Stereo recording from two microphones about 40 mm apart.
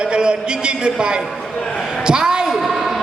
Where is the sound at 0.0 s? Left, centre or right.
Right.